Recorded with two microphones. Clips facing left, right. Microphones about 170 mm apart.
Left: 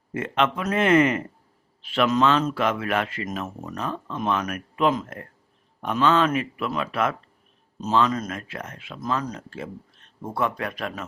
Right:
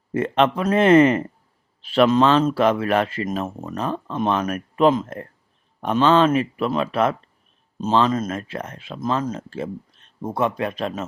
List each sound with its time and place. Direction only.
0.1 s speech: 35° right (ahead or behind)